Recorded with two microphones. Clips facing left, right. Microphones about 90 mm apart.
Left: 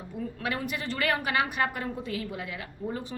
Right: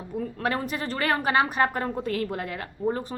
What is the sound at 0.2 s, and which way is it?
A woman's voice, 40° right (ahead or behind).